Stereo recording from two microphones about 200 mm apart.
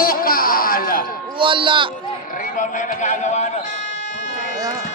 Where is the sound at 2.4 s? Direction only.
40° left (ahead or behind).